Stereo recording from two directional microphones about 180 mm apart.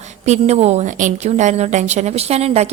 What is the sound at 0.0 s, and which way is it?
A woman's voice, 40° right (ahead or behind).